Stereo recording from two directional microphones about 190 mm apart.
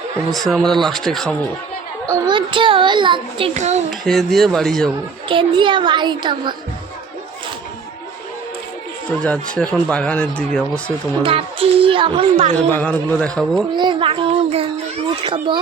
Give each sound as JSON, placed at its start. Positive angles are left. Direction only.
{"t": 0.4, "sound": "a man's voice", "side_deg": 0}
{"t": 2.0, "sound": "a child's voice", "side_deg": -20}
{"t": 3.8, "sound": "a man's voice", "side_deg": 0}
{"t": 5.3, "sound": "a child's voice", "side_deg": -25}
{"t": 9.2, "sound": "a man's voice", "side_deg": 5}
{"t": 11.2, "sound": "speech", "side_deg": -30}
{"t": 12.5, "sound": "a man's voice", "side_deg": 5}
{"t": 13.7, "sound": "a child's voice", "side_deg": -25}